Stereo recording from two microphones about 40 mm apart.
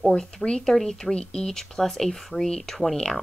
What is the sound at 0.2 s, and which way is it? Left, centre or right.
Speech, centre.